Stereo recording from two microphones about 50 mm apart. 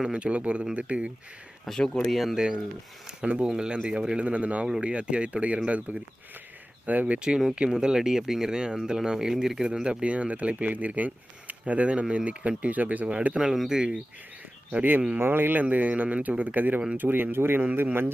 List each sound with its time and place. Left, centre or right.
0.1 s speech: right
1.6 s speech: centre
2.3 s speech: centre
4.2 s speech: right
7.2 s speech: centre; by 13.1 s right
13.1 s speech: right
14.8 s speech: right